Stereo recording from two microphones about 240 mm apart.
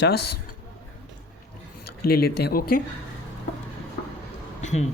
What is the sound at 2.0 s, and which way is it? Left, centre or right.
Speech, left.